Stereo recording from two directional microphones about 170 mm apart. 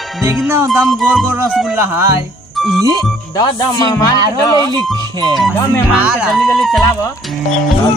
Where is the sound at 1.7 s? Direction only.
15° right (ahead or behind).